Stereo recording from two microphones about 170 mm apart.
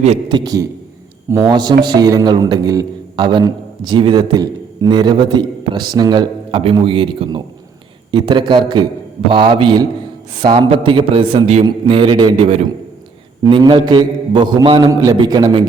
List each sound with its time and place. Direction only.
0.3 s a man's voice: 25° right (ahead or behind)